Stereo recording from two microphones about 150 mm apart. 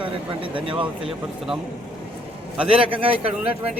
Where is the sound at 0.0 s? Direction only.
35° right (ahead or behind).